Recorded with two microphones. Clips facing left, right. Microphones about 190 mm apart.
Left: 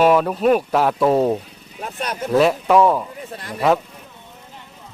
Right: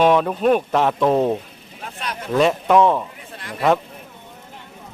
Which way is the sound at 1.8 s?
45° left (ahead or behind).